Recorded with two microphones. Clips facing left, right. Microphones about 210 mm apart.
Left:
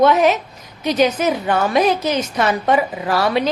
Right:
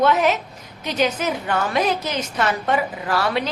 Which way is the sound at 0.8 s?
15° left (ahead or behind).